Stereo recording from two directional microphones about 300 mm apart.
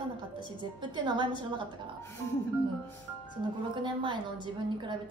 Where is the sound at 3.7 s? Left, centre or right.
Centre.